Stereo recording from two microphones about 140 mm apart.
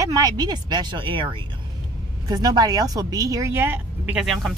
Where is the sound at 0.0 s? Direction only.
25° right (ahead or behind).